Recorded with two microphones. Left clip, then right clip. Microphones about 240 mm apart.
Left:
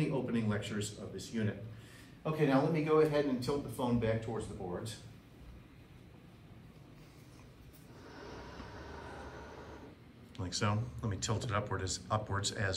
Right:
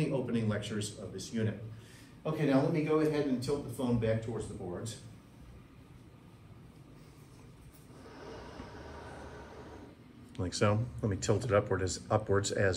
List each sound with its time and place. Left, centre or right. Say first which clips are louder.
0.0 s a man's voice: right 2 dB; centre; by 4.4 s left
10.3 s speech: right 5 dB; centre